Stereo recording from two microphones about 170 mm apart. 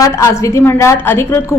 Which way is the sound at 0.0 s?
20° left (ahead or behind).